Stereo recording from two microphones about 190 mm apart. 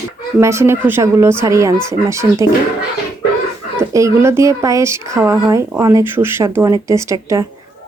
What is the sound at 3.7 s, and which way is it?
Speech, 15° right (ahead or behind).